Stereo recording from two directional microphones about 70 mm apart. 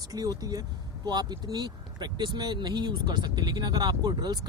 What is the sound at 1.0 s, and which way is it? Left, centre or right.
Speech, right.